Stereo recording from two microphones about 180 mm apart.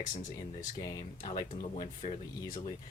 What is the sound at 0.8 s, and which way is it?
Speech, 20° left (ahead or behind).